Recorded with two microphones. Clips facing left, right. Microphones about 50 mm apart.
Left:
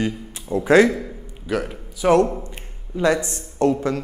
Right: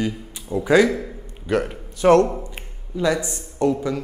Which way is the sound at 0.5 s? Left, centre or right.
Left.